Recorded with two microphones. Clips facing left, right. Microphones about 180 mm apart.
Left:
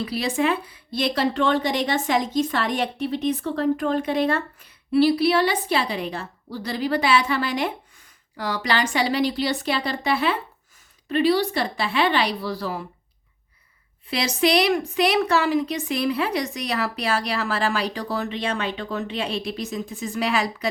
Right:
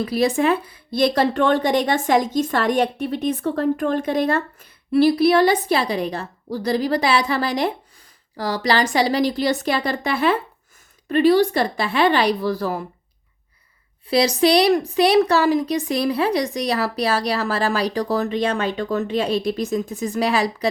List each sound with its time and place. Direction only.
0.0 s a woman's voice: 45° right (ahead or behind)
14.1 s a woman's voice: 35° right (ahead or behind)